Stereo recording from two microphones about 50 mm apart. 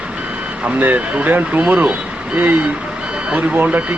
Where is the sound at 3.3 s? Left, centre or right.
Right.